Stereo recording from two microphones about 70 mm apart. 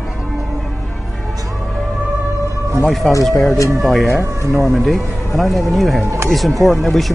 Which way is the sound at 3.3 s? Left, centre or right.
Centre.